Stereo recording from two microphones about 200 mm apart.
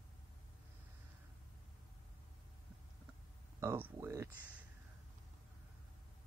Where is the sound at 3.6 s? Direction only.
15° right (ahead or behind).